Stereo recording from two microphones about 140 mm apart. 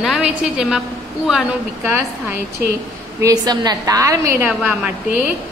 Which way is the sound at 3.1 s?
25° right (ahead or behind).